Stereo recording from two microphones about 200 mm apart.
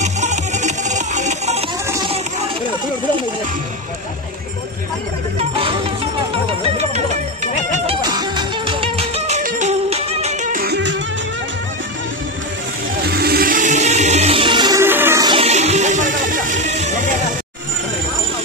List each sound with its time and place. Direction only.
0.0 s music: 35° right (ahead or behind)
1.9 s a sound: 20° right (ahead or behind)
5.4 s music: 25° right (ahead or behind)
8.0 s music: 20° right (ahead or behind); by 11.0 s 60° right (ahead or behind)
13.1 s music: 50° right (ahead or behind); by 15.3 s 15° right (ahead or behind)
15.3 s music: 30° right (ahead or behind)